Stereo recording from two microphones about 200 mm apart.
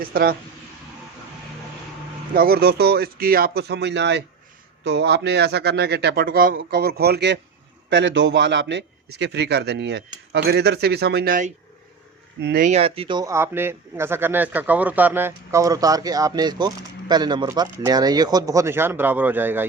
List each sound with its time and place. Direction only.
0.0 s speech: 45° right (ahead or behind)
2.3 s a man's voice: 50° right (ahead or behind)
12.4 s a man's voice: 55° right (ahead or behind)
12.6 s a man's voice: 30° right (ahead or behind); by 19.6 s 10° right (ahead or behind)